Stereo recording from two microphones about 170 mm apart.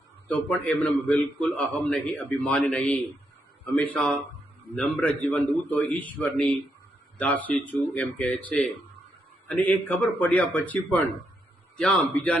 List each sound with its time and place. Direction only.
0.3 s a man's voice: 10° left (ahead or behind)